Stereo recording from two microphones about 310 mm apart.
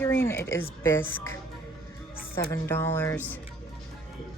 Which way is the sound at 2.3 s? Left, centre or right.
Centre.